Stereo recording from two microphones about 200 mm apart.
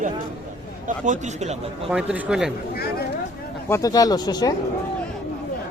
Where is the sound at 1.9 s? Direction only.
5° right (ahead or behind).